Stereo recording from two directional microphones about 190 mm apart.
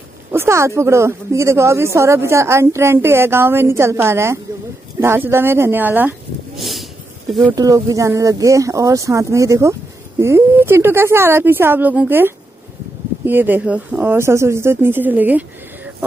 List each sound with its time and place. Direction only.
0.3 s speech: 15° right (ahead or behind)
7.5 s speech: 20° right (ahead or behind)